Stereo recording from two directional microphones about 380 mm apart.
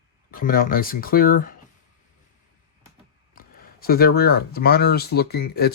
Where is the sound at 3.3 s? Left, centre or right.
Left.